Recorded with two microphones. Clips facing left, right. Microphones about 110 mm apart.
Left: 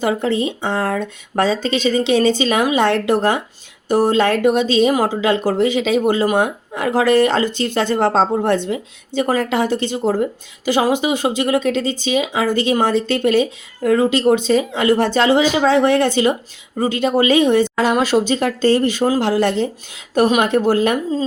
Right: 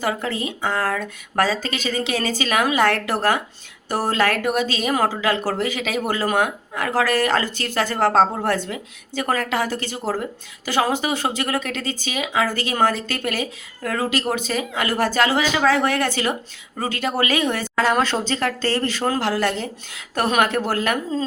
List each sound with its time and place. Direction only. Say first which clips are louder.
0.0 s speech: left 6 dB; 25° left (ahead or behind)